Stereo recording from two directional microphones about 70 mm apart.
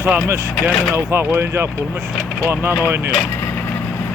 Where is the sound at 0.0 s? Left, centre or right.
Right.